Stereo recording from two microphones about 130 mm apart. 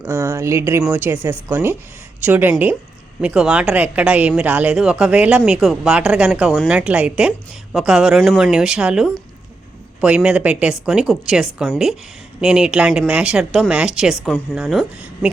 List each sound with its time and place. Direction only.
0.0 s a woman's voice: 25° right (ahead or behind); by 14.8 s centre (ahead or behind)